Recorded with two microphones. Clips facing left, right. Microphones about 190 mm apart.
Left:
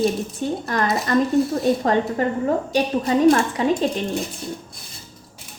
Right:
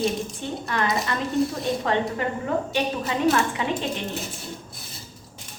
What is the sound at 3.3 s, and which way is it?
Speech, 40° left (ahead or behind).